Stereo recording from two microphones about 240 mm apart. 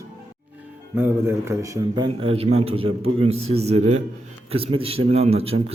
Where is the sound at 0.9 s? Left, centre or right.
Centre.